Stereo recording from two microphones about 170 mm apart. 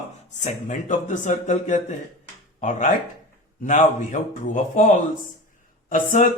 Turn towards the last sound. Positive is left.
turn(degrees=50)  # may be behind; listen again after turning